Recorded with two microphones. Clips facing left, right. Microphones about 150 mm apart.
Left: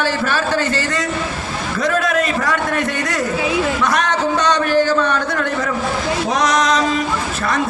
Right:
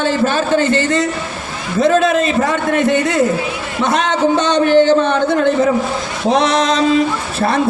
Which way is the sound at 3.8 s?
25° right (ahead or behind).